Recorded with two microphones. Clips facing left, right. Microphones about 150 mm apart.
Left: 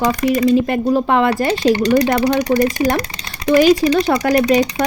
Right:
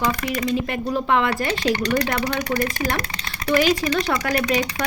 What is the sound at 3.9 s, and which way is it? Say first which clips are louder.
Speech: left 8 dB; 35° left (ahead or behind).